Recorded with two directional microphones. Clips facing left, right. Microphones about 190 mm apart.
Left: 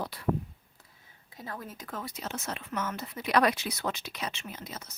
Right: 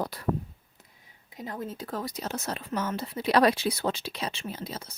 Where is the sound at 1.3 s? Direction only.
20° right (ahead or behind).